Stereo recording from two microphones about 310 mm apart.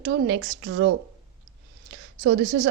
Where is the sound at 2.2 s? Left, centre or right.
Right.